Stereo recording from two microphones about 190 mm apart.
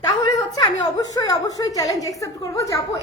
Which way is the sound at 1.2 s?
20° left (ahead or behind).